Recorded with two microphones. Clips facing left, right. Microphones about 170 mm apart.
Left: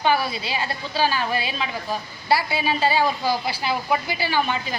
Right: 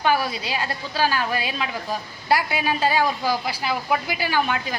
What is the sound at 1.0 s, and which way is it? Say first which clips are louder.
Speech: even; 5° right (ahead or behind).